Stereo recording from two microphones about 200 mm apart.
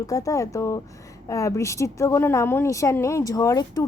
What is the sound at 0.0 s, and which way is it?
A woman's voice, 15° left (ahead or behind).